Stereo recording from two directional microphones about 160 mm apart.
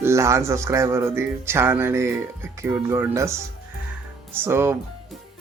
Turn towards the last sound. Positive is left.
turn(degrees=-15)  # may be behind; listen again after turning